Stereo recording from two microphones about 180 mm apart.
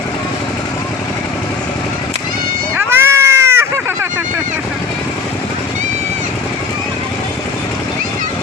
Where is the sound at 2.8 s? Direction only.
15° right (ahead or behind).